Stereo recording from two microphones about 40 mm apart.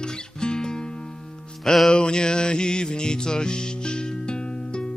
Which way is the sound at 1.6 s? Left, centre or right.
Centre.